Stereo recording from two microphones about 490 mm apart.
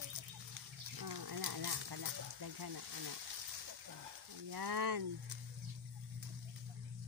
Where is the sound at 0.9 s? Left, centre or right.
Right.